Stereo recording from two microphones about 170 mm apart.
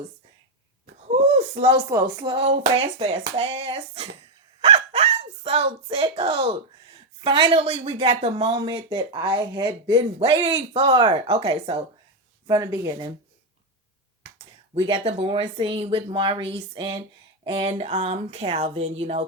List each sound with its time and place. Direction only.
1.5 s a woman's voice: 30° right (ahead or behind)
12.5 s speech: 20° right (ahead or behind)
14.3 s a woman's voice: 35° right (ahead or behind)